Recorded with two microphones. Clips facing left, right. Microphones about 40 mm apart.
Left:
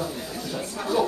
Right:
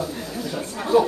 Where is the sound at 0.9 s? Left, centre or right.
Centre.